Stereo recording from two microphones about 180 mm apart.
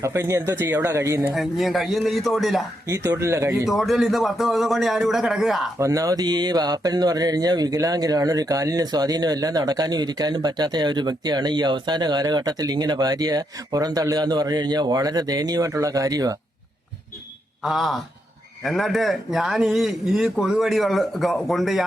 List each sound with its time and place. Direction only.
0.0 s speech: 15° right (ahead or behind)
1.3 s a man's voice: centre (ahead or behind)
2.8 s speech: 15° right (ahead or behind)
3.7 s a man's voice: centre (ahead or behind)
5.8 s speech: 20° right (ahead or behind)
17.6 s a man's voice: centre (ahead or behind)